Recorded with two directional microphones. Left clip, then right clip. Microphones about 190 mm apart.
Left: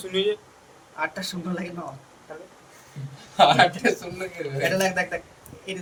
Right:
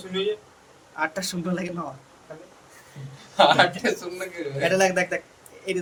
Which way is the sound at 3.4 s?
15° right (ahead or behind).